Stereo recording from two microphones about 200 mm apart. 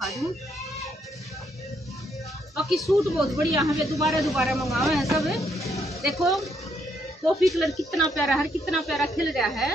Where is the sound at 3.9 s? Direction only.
Centre (ahead or behind).